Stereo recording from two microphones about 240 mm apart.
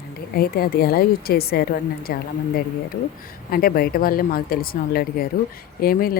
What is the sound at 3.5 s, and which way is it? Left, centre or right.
Speech, left.